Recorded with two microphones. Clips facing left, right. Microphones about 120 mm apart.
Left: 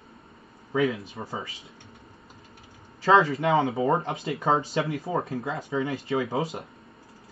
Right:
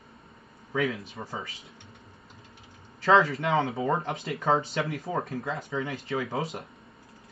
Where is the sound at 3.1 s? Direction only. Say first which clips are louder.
Left 2 dB; 30° left (ahead or behind).